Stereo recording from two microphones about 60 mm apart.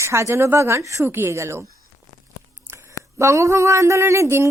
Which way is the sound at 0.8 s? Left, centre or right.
Right.